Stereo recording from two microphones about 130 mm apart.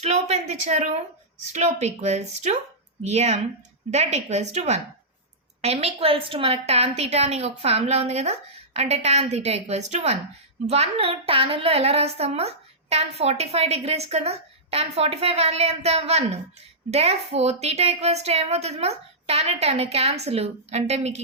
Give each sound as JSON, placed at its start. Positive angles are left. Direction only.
{"t": 0.0, "sound": "a woman's voice", "side_deg": -55}